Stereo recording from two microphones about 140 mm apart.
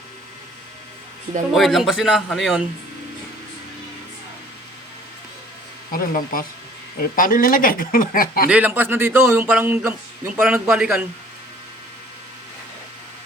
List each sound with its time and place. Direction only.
1.5 s a man's voice: centre (ahead or behind)
5.9 s speech: 90° left
8.4 s speech: 10° right (ahead or behind)